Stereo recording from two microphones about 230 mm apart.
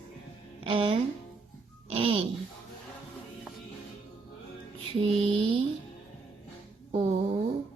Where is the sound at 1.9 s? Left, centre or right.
Right.